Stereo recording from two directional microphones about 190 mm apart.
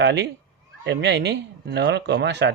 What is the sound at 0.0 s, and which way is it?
Speech, 65° right (ahead or behind).